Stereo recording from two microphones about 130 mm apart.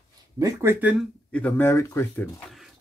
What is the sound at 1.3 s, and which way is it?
Speech, 15° left (ahead or behind).